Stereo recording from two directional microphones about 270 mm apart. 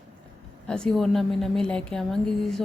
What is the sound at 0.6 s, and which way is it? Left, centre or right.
A woman's voice, centre.